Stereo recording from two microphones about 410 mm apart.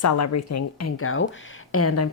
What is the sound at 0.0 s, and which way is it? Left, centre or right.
Speech, left.